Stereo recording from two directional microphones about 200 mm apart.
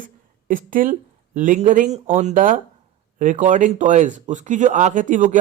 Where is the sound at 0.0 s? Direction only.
40° right (ahead or behind).